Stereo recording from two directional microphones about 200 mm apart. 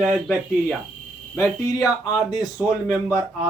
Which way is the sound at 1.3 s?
15° left (ahead or behind).